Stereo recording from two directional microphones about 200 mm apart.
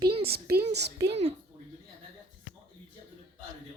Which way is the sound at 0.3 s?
50° right (ahead or behind).